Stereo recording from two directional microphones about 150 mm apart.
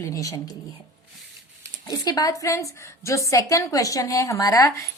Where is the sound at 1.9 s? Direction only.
25° left (ahead or behind).